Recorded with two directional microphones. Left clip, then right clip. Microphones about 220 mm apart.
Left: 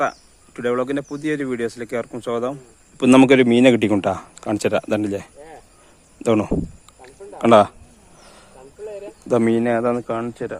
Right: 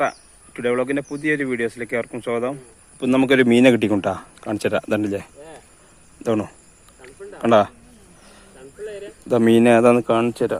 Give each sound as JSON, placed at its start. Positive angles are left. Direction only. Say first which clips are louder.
{"t": 0.0, "sound": "a sound", "louder": "even", "side_deg": 5}
{"t": 0.9, "sound": "speech", "louder": "right 2 dB", "side_deg": 0}
{"t": 2.2, "sound": "speech", "louder": "left 2 dB", "side_deg": 15}
{"t": 3.0, "sound": "speech", "louder": "left 6 dB", "side_deg": 45}
{"t": 3.4, "sound": "speech", "louder": "even", "side_deg": 5}
{"t": 6.2, "sound": "speech", "louder": "left 4 dB", "side_deg": 15}
{"t": 8.2, "sound": "snake", "louder": "left 3 dB", "side_deg": 15}
{"t": 9.2, "sound": "speech", "louder": "even", "side_deg": 5}
{"t": 9.5, "sound": "speech", "louder": "right 5 dB", "side_deg": -15}